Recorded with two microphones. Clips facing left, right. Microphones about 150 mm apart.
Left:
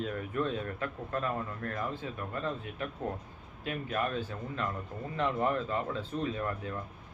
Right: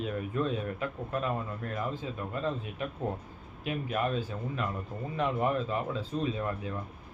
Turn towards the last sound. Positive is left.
turn(degrees=-15)  # may be behind; listen again after turning